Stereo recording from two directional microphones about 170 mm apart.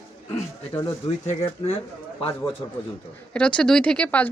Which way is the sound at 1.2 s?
35° left (ahead or behind).